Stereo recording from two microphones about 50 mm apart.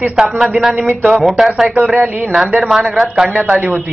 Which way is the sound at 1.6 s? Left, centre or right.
Right.